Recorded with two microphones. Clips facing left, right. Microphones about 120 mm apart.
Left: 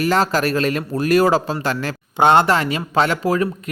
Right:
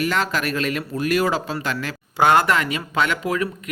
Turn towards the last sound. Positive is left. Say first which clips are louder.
# left 5 dB
turn(degrees=35)  # may be behind; listen again after turning